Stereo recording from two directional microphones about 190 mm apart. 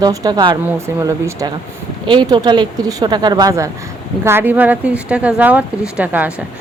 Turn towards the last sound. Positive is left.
turn(degrees=-10)  # may be behind; listen again after turning